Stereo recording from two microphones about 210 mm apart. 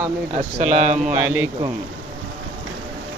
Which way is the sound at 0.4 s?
35° right (ahead or behind).